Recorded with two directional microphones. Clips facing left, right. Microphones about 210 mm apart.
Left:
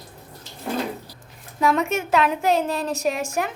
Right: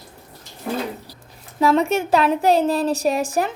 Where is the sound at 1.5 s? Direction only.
30° right (ahead or behind).